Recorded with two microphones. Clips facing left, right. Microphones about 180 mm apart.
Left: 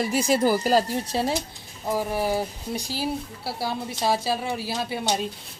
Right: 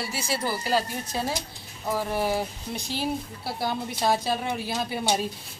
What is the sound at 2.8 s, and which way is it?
Speech, 35° left (ahead or behind).